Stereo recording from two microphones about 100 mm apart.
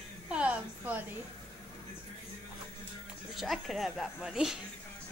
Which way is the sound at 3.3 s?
Centre (ahead or behind).